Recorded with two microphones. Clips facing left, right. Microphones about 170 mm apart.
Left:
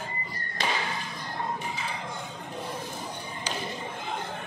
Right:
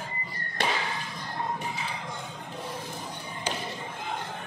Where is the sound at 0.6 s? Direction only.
65° right (ahead or behind).